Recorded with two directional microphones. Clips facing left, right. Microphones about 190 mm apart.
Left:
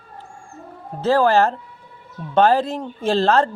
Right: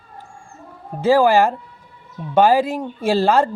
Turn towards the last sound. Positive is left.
turn(degrees=-10)  # may be behind; listen again after turning